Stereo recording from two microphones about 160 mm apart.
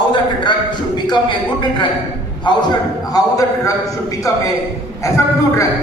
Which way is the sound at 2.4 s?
25° left (ahead or behind).